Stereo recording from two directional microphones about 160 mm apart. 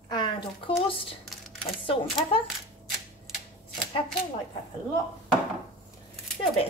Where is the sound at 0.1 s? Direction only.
25° left (ahead or behind).